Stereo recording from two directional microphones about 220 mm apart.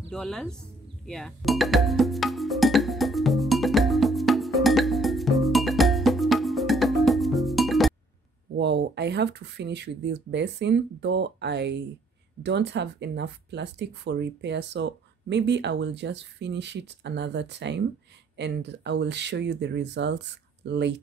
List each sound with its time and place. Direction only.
0.1 s speech: centre (ahead or behind)
1.0 s music: centre (ahead or behind)
8.5 s speech: 50° right (ahead or behind)